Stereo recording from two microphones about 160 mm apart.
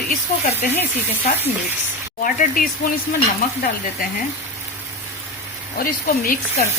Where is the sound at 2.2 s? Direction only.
55° left (ahead or behind).